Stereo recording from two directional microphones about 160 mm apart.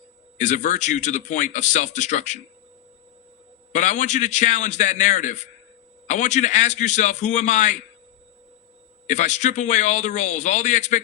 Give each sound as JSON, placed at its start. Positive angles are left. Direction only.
{"t": 0.3, "sound": "speech", "side_deg": 50}
{"t": 3.7, "sound": "speech", "side_deg": 50}
{"t": 9.0, "sound": "speech", "side_deg": 50}